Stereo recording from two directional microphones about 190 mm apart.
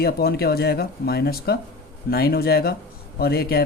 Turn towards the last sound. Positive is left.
turn(degrees=55)  # may be behind; listen again after turning